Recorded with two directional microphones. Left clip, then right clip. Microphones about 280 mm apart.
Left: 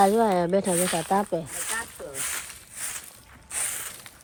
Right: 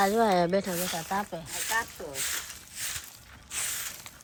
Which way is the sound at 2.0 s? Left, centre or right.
Centre.